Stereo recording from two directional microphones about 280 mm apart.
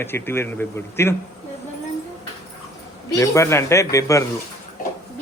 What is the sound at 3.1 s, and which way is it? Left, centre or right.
A man's voice, centre.